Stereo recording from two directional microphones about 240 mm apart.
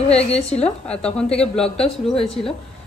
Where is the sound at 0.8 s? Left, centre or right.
Centre.